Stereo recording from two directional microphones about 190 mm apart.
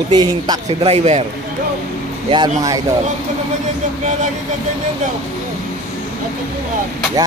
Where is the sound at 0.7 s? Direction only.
30° right (ahead or behind).